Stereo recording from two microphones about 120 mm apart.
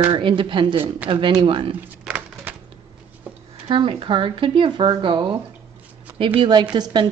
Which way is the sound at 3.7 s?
45° right (ahead or behind).